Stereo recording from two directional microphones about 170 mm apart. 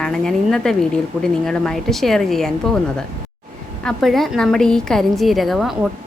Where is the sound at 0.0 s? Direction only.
5° left (ahead or behind).